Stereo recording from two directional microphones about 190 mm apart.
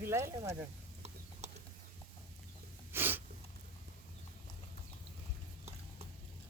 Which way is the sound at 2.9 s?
10° right (ahead or behind).